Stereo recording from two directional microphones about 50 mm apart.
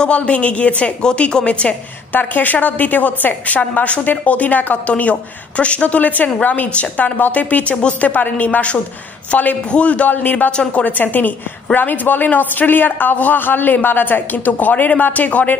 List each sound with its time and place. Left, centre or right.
0.0 s a woman's voice: left
2.1 s a man's voice: left
8.1 s a man's voice: left
10.5 s a woman's voice: centre
10.8 s a man's voice: left